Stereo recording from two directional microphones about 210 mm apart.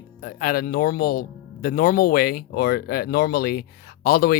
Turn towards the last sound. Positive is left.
turn(degrees=45)  # may be behind; listen again after turning